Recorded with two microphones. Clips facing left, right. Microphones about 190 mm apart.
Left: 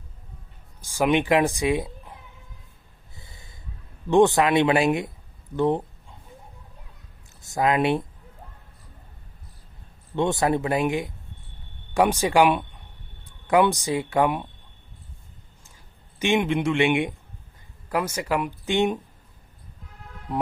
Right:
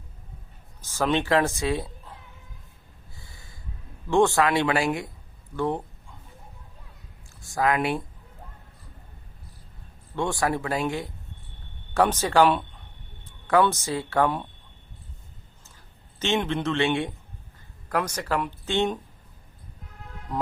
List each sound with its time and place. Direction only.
0.8 s speech: 15° left (ahead or behind)
3.2 s snort: 20° left (ahead or behind)
4.1 s speech: 20° left (ahead or behind)
5.5 s a sound: 20° left (ahead or behind)
7.4 s speech: 20° left (ahead or behind)
10.2 s speech: 20° left (ahead or behind)
16.1 s speech: 15° left (ahead or behind)